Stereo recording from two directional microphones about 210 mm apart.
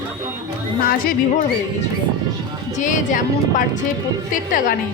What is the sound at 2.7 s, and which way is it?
Speech, 35° left (ahead or behind).